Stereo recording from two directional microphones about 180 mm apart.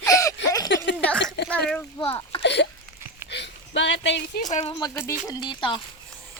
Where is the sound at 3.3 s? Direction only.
80° left.